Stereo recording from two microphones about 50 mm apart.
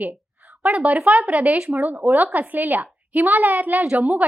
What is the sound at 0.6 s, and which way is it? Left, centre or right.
A woman's voice, right.